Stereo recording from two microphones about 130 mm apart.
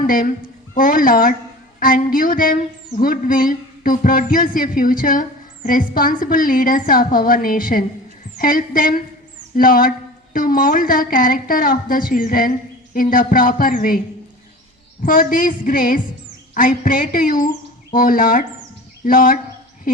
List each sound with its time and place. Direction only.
0.0 s a woman's voice: 90° left
15.0 s a woman's voice: 90° left